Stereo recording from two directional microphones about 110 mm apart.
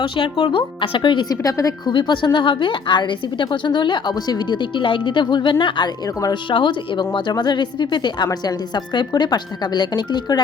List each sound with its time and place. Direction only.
0.0 s a woman's voice: 50° left (ahead or behind)
1.5 s a woman's voice: 30° left (ahead or behind)
1.9 s a woman's voice: 45° left (ahead or behind)